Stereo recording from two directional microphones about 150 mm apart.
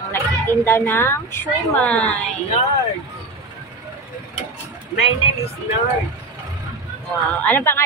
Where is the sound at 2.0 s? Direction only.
45° left (ahead or behind).